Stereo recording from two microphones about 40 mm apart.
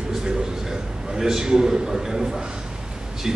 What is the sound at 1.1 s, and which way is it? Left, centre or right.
A man's voice, centre.